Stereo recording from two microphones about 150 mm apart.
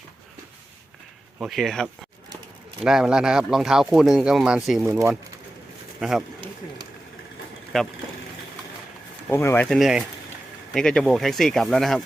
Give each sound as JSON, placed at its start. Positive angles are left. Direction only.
{"t": 1.4, "sound": "speech", "side_deg": 0}
{"t": 4.9, "sound": "speech", "side_deg": -20}
{"t": 6.0, "sound": "speech", "side_deg": -5}
{"t": 7.7, "sound": "speech", "side_deg": 0}
{"t": 9.3, "sound": "speech", "side_deg": 15}
{"t": 9.6, "sound": "speech", "side_deg": 0}